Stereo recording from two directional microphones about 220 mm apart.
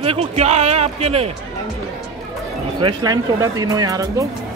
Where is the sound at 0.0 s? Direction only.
25° right (ahead or behind).